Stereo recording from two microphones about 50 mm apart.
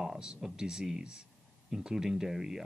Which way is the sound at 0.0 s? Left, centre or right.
Centre.